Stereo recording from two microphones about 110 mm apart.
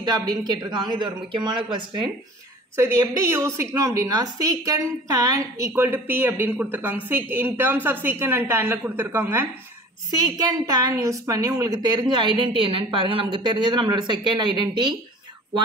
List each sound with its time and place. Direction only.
0.0 s a woman's voice: 35° right (ahead or behind)
2.7 s a woman's voice: 25° right (ahead or behind)
10.1 s a woman's voice: 35° right (ahead or behind)